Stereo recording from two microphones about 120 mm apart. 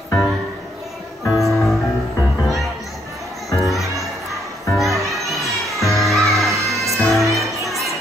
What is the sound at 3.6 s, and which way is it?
Music, centre (ahead or behind).